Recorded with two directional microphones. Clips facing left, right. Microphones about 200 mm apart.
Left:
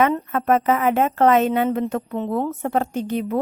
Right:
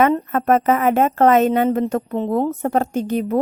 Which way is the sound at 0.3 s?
45° right (ahead or behind).